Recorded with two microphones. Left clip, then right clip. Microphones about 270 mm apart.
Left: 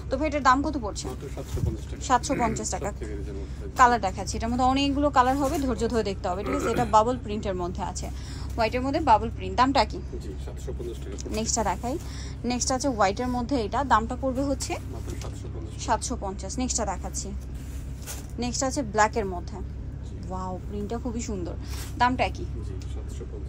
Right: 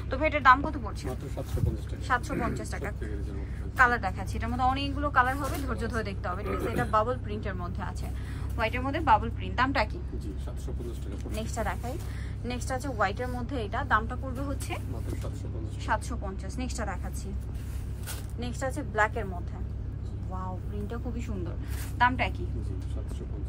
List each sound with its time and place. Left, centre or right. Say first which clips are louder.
0.1 s a woman's voice: even; centre
2.0 s a woman's voice: left 6 dB; centre
11.3 s a woman's voice: left 7 dB; centre
15.8 s a woman's voice: left 4 dB; centre
18.4 s a woman's voice: left 6 dB; centre
21.9 s a woman's voice: left 2 dB; centre